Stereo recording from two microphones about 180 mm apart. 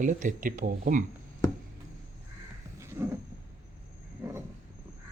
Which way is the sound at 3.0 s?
10° right (ahead or behind).